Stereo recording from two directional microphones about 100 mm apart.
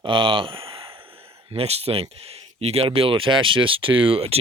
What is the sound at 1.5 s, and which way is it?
Speech, 90° right.